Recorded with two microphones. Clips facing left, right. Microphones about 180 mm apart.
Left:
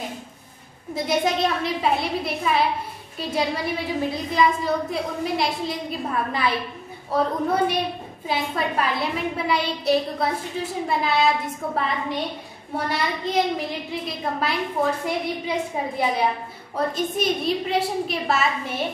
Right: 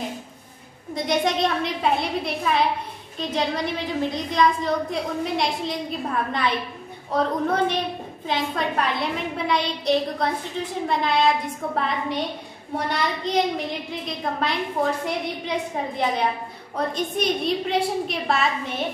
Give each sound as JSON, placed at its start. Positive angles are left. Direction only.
{"t": 0.9, "sound": "a woman's voice", "side_deg": 5}
{"t": 16.7, "sound": "a woman's voice", "side_deg": 5}